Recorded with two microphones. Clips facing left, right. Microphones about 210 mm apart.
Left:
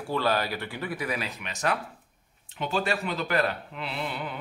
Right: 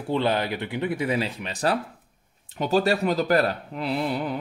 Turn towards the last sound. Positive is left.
turn(degrees=-40)  # may be behind; listen again after turning